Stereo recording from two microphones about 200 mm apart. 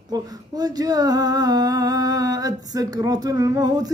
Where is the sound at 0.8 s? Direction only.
20° right (ahead or behind).